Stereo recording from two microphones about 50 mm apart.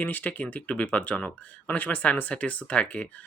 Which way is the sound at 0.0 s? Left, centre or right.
Left.